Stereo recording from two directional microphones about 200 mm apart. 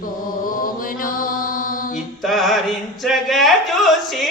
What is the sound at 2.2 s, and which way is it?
Music, centre (ahead or behind).